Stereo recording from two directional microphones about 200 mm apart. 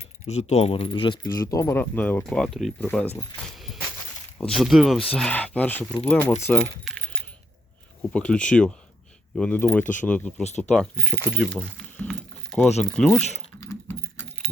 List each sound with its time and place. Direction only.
0.3 s speech: 35° left (ahead or behind); by 3.1 s 5° left (ahead or behind)
4.4 s speech: centre (ahead or behind)
6.8 s coin: 5° left (ahead or behind)
8.1 s speech: 5° left (ahead or behind)
11.8 s keys jangling: 5° left (ahead or behind)
12.8 s speech: centre (ahead or behind)
13.6 s keys jangling: 10° left (ahead or behind)